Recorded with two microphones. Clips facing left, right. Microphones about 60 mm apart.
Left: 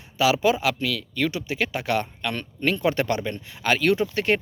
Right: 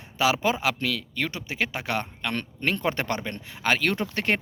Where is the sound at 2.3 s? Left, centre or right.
Right.